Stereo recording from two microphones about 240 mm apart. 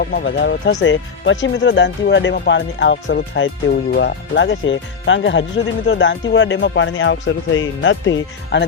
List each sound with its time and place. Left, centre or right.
0.0 s speech: left